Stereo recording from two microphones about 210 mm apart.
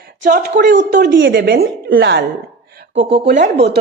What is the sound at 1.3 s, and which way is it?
A woman's voice, 45° right (ahead or behind).